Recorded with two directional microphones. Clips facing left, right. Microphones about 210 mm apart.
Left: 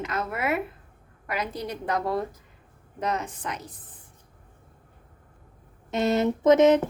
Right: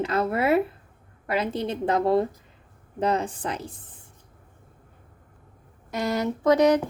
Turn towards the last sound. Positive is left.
turn(degrees=25)  # may be behind; listen again after turning